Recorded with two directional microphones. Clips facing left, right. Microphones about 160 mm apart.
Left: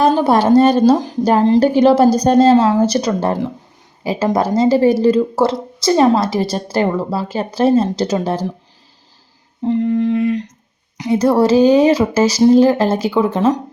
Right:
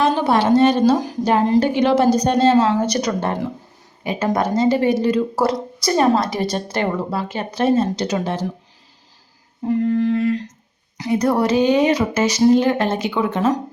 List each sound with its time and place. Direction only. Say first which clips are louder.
0.0 s speech: left 4 dB; 40° left (ahead or behind)
9.6 s humming: left 2 dB; 20° left (ahead or behind)
10.9 s speech: left 4 dB; 20° left (ahead or behind)